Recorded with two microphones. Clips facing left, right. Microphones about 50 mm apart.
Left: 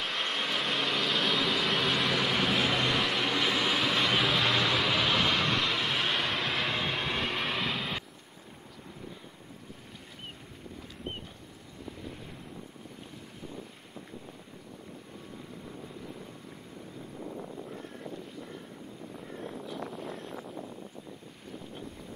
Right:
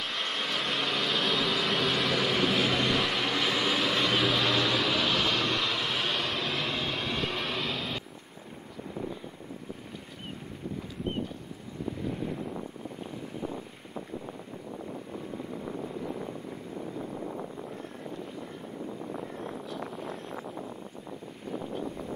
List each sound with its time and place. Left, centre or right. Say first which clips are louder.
0.0 s vehicle: even; centre
12.1 s boat: right 11 dB; centre
15.3 s vehicle: right 8 dB; centre